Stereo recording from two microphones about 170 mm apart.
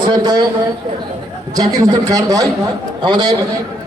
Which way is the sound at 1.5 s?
20° right (ahead or behind).